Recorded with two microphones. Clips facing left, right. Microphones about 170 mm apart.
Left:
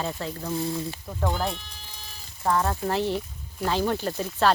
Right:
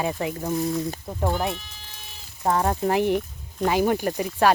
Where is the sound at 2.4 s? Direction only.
20° right (ahead or behind).